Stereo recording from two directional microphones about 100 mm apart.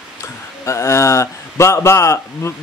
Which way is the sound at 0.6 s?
30° left (ahead or behind).